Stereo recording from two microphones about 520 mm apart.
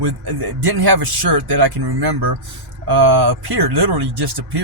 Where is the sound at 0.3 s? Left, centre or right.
Right.